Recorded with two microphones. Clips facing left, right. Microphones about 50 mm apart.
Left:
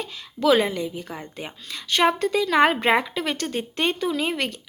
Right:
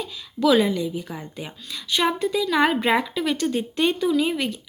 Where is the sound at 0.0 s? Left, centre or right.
Left.